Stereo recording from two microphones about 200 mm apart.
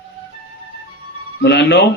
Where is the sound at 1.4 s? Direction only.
55° left (ahead or behind).